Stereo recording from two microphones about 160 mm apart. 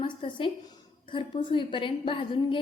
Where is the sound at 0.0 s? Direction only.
30° left (ahead or behind).